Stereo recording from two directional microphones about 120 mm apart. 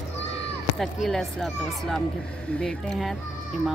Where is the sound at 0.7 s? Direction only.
Centre (ahead or behind).